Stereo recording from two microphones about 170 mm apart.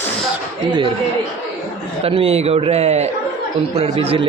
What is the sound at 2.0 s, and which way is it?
A man's voice, 35° right (ahead or behind).